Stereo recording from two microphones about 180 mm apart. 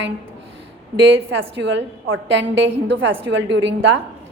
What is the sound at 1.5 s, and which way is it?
A woman's voice, 90° right.